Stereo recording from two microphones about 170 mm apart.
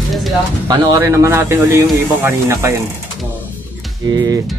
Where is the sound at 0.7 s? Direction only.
20° right (ahead or behind).